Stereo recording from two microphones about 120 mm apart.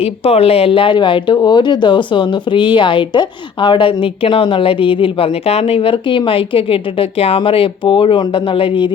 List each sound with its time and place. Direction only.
0.0 s speech: 55° left (ahead or behind)